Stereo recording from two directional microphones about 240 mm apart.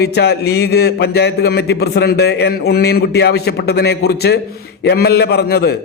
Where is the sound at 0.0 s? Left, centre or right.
Left.